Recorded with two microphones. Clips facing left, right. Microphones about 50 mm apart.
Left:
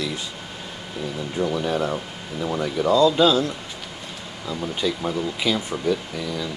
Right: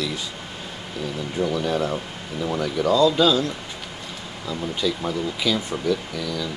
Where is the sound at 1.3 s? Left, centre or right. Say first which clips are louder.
Even; centre.